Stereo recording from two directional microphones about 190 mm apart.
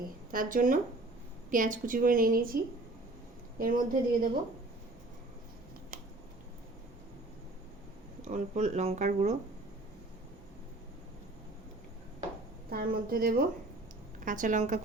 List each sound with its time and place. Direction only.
0.3 s a woman's voice: 45° right (ahead or behind)
3.6 s a woman's voice: 45° right (ahead or behind)
8.2 s speech: 40° right (ahead or behind)
12.7 s a woman's voice: 50° right (ahead or behind)